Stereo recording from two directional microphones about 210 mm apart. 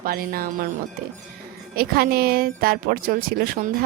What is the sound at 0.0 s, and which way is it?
Speech, 45° right (ahead or behind).